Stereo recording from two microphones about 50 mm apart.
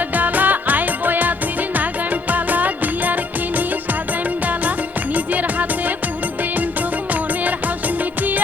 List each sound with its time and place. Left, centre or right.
0.2 s music: right
2.3 s music: right
5.1 s music: right